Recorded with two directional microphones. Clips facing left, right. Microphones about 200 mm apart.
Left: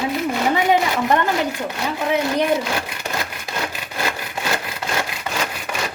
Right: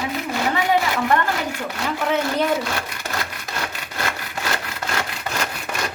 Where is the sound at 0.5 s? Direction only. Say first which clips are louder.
Left 2 dB; 20° left (ahead or behind).